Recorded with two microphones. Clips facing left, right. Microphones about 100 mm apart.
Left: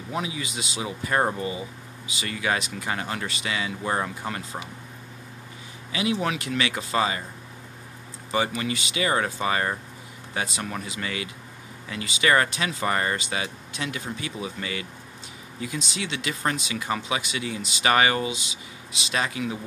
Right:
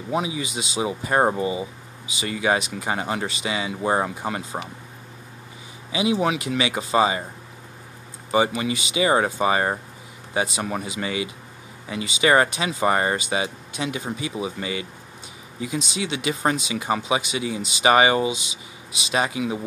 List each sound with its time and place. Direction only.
0.1 s speech: 20° right (ahead or behind)
5.9 s speech: 20° right (ahead or behind)
8.3 s speech: 20° right (ahead or behind)